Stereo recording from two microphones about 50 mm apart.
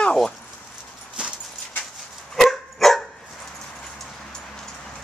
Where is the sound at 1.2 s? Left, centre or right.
Centre.